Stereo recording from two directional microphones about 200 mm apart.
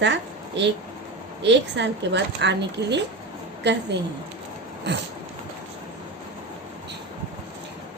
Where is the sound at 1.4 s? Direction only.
60° right (ahead or behind).